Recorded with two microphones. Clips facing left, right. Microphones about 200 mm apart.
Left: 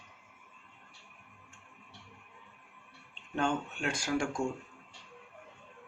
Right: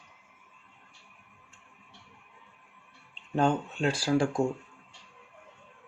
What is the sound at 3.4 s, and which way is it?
Speech, 35° right (ahead or behind).